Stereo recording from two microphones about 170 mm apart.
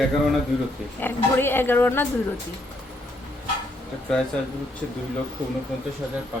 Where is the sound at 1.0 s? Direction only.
15° left (ahead or behind).